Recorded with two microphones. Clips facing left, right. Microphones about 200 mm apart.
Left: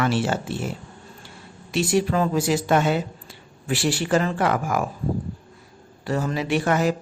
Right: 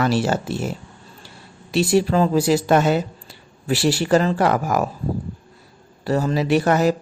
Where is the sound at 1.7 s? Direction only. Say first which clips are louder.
Right 4 dB; 35° right (ahead or behind).